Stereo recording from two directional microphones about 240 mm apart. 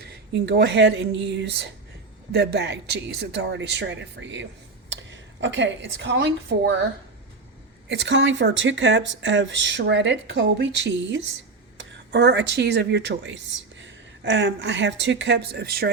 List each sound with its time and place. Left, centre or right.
0.0 s a woman's voice: right
7.9 s speech: right